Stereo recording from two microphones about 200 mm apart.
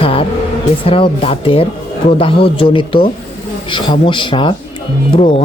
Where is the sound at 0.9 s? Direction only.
25° left (ahead or behind).